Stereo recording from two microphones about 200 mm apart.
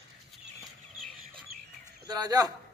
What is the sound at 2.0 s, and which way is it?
Speech, 20° right (ahead or behind).